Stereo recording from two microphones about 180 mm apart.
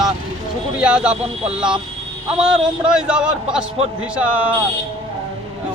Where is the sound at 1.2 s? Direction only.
35° right (ahead or behind).